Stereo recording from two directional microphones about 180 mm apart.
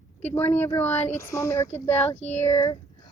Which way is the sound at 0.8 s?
35° left (ahead or behind).